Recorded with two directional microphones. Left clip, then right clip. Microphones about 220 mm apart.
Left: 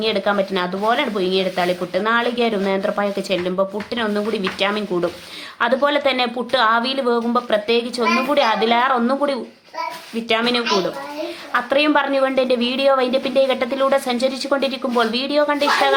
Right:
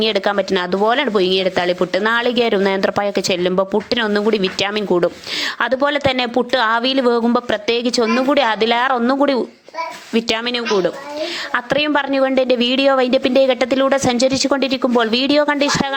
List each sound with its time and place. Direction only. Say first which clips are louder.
0.0 s speech: right 2 dB; 35° right (ahead or behind)